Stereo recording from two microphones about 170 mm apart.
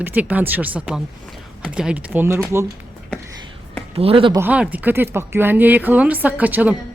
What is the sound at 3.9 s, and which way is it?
Speech, 35° right (ahead or behind).